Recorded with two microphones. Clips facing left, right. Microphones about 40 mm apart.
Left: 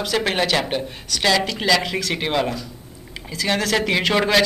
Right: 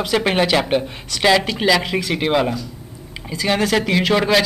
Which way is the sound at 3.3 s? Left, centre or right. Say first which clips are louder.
Right 3 dB; centre.